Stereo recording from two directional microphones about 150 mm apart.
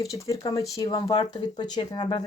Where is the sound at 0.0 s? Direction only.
25° left (ahead or behind).